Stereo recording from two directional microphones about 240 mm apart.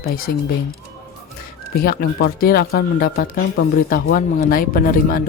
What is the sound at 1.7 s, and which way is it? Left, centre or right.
Speech, left.